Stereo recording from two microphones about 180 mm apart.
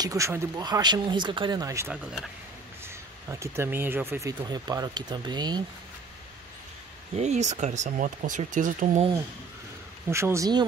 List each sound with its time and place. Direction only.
0.0 s speech: 15° right (ahead or behind)
7.2 s speech: 40° right (ahead or behind)
10.0 s speech: 15° right (ahead or behind)